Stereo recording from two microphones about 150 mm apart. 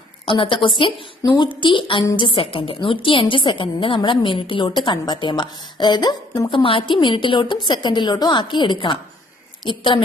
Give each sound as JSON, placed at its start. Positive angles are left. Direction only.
{"t": 0.3, "sound": "a woman's voice", "side_deg": 35}